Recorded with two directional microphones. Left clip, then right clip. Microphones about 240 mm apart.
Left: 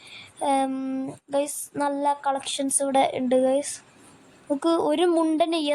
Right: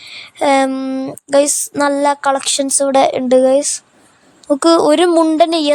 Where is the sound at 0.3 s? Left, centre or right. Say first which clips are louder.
Right 11 dB; right.